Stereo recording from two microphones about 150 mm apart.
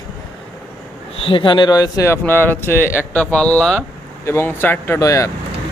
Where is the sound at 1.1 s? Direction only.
35° left (ahead or behind).